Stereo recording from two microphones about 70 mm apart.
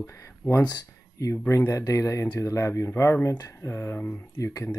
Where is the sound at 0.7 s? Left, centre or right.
Left.